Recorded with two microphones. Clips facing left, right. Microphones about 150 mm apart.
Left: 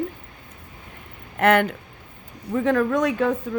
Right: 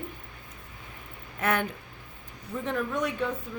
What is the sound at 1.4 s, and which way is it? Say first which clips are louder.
Speech: left 10 dB; 70° left (ahead or behind).